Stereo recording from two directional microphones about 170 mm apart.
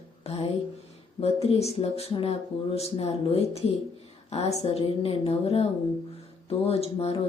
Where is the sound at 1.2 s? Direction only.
40° left (ahead or behind).